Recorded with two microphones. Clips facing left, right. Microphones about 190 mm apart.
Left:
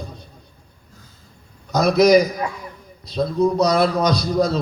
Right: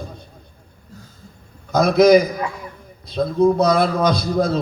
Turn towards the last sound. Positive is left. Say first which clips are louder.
# even
turn(degrees=-50)  # may be behind; listen again after turning